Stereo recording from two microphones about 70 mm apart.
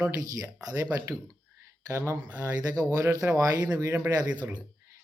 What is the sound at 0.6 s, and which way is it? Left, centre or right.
Speech, right.